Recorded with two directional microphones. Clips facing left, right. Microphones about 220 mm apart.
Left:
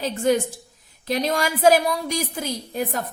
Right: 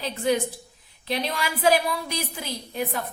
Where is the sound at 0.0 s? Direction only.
45° left (ahead or behind).